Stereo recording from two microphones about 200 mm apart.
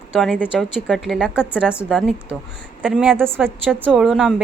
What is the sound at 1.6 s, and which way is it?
Speech, 5° right (ahead or behind).